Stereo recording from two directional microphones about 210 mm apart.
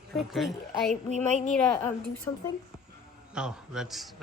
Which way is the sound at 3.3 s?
5° right (ahead or behind).